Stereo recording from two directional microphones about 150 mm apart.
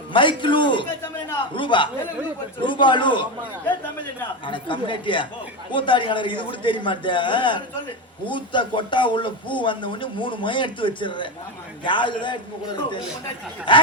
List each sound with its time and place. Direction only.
0.1 s speech: 35° left (ahead or behind)
4.4 s speech: 35° left (ahead or behind)